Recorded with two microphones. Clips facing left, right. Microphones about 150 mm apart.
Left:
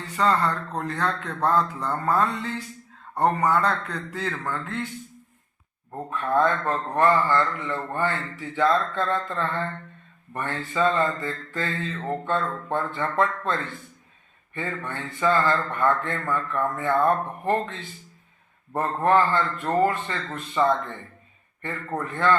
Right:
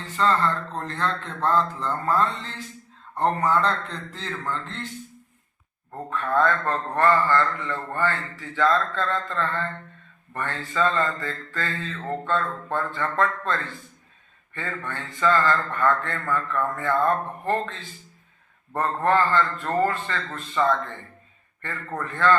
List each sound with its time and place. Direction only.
0.2 s a man's voice: 15° left (ahead or behind)
5.9 s a man's voice: 20° left (ahead or behind)